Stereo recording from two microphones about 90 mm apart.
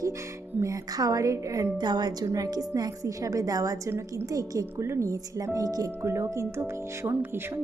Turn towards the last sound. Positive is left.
turn(degrees=-30)  # may be behind; listen again after turning